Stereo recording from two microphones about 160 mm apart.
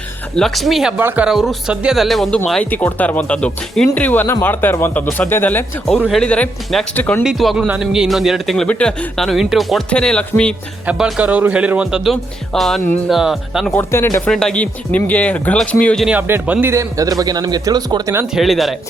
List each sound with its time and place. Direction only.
0.3 s a man's voice: centre (ahead or behind)
7.3 s a man's voice: centre (ahead or behind)
10.8 s a man's voice: 5° right (ahead or behind)
13.7 s speech: 15° left (ahead or behind)
14.3 s speech: 5° left (ahead or behind)
16.0 s a man's voice: 10° right (ahead or behind)
18.3 s a man's voice: centre (ahead or behind)